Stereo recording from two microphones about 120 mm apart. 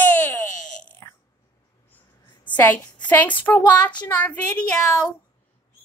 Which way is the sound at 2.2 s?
40° left (ahead or behind).